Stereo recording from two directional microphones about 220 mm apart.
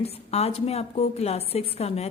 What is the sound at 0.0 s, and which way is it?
A woman's voice, 30° left (ahead or behind).